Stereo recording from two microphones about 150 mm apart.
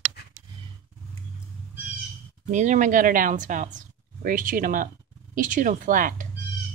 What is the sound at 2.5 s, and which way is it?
Speech, 55° right (ahead or behind).